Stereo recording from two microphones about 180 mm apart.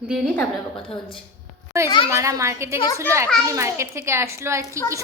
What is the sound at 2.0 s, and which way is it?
A woman's voice, 15° right (ahead or behind).